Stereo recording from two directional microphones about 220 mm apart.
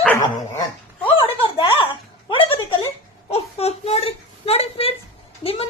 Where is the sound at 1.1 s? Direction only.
25° left (ahead or behind).